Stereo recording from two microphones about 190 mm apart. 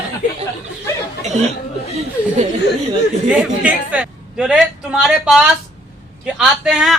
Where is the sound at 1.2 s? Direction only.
35° right (ahead or behind).